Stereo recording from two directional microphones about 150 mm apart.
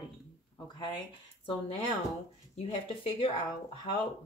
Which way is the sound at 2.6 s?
40° left (ahead or behind).